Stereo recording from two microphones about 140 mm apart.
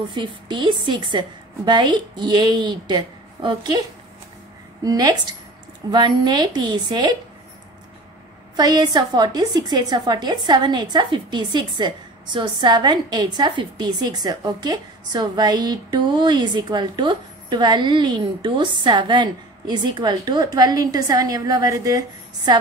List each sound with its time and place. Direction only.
0.1 s a woman's voice: 35° right (ahead or behind)
4.8 s a woman's voice: 30° right (ahead or behind)
8.5 s a woman's voice: 30° right (ahead or behind)